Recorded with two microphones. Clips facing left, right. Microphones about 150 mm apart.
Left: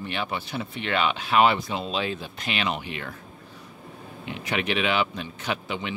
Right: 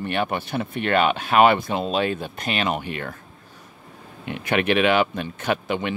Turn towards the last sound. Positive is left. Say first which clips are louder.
# right 6 dB
turn(degrees=-55)  # may be behind; listen again after turning